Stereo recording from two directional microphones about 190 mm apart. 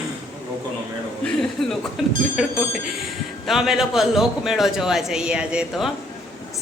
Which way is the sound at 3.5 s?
Centre (ahead or behind).